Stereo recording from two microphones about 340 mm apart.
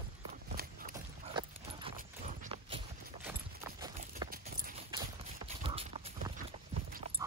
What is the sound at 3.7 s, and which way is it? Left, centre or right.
Horse, centre.